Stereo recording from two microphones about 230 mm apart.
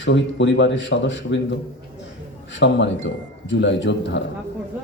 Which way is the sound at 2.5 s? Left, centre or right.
Left.